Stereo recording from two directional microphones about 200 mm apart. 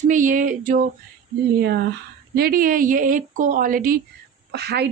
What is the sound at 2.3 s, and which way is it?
Speech, 50° right (ahead or behind).